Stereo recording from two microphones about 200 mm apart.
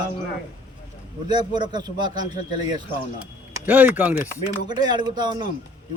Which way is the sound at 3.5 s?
10° right (ahead or behind).